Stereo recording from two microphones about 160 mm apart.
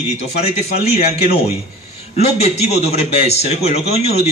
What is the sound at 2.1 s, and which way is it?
A man's voice, 40° left (ahead or behind).